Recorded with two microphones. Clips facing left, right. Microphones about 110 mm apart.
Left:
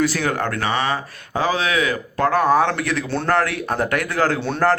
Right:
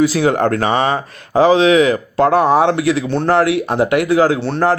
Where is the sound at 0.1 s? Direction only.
25° right (ahead or behind).